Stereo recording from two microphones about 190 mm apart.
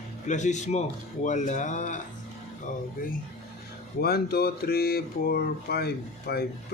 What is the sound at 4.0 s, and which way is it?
Speech, 55° left (ahead or behind).